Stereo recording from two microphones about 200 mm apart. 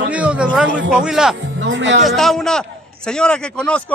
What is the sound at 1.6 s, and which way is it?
Speech, 65° right (ahead or behind).